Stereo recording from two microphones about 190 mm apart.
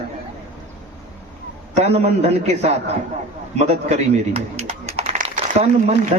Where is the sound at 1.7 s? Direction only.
35° right (ahead or behind).